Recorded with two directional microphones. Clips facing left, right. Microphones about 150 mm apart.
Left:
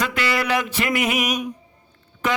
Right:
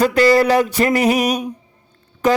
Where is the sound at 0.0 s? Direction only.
40° right (ahead or behind).